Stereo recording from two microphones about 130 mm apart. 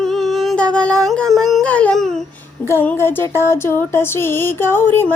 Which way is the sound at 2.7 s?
15° left (ahead or behind).